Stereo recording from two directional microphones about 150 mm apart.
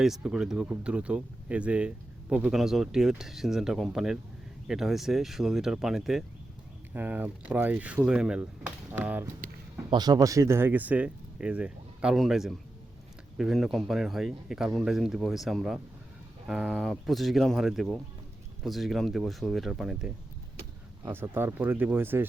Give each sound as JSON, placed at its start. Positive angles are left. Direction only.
{"t": 0.0, "sound": "speech", "side_deg": -5}
{"t": 9.9, "sound": "speech", "side_deg": -25}
{"t": 21.0, "sound": "speech", "side_deg": -15}